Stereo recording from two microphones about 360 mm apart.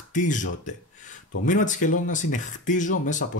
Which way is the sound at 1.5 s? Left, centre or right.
Left.